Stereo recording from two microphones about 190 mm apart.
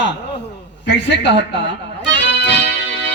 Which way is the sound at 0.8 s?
65° left (ahead or behind).